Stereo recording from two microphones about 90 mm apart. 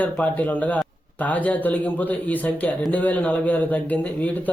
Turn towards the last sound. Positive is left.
turn(degrees=15)  # may be behind; listen again after turning